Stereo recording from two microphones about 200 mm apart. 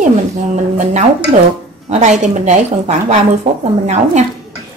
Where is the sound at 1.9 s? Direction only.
35° right (ahead or behind).